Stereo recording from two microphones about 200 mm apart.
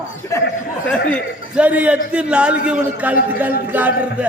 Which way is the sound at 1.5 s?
5° right (ahead or behind).